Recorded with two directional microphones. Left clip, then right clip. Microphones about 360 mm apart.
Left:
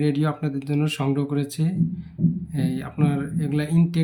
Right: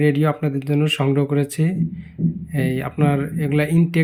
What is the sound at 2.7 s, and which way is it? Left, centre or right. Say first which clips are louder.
Speech: right 6 dB; centre.